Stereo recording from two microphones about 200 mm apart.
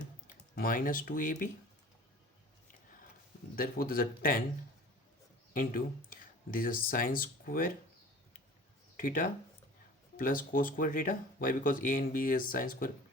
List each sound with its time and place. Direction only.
0.5 s speech: 45° left (ahead or behind)
3.5 s speech: 45° left (ahead or behind)
5.5 s speech: 45° left (ahead or behind)
9.0 s speech: 45° left (ahead or behind)